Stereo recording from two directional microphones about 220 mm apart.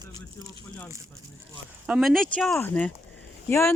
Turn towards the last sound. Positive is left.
turn(degrees=10)  # may be behind; listen again after turning